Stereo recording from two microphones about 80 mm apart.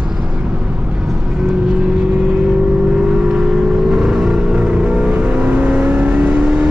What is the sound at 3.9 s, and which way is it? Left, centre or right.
Vehicle, centre.